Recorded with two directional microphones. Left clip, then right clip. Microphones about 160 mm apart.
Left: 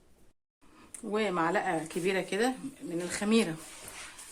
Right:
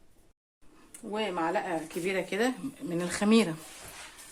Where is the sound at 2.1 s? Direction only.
Centre (ahead or behind).